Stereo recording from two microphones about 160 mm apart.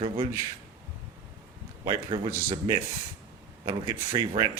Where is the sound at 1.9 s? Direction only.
30° right (ahead or behind).